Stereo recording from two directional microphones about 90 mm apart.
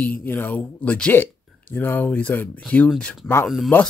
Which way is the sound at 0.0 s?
20° left (ahead or behind).